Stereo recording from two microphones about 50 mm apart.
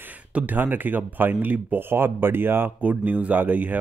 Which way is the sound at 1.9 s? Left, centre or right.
Right.